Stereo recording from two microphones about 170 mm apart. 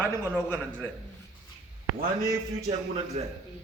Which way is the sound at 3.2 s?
40° right (ahead or behind).